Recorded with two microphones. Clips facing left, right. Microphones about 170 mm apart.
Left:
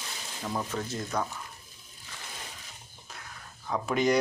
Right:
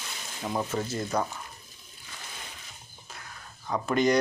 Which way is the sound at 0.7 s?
5° right (ahead or behind).